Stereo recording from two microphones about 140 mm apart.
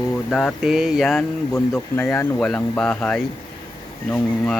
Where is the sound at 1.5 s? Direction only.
20° left (ahead or behind).